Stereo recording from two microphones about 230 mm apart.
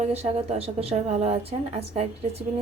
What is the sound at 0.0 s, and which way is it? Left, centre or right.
A woman's voice, right.